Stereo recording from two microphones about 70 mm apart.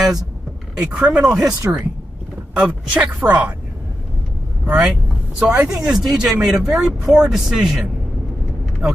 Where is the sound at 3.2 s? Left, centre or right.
Right.